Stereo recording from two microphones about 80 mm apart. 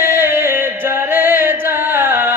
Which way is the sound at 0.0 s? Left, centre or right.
Right.